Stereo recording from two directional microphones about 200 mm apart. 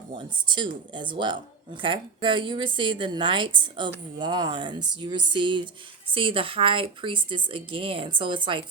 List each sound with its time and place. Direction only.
0.2 s speech: 25° right (ahead or behind)